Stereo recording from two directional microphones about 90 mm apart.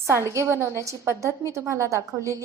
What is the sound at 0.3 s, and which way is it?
A woman's voice, 30° right (ahead or behind).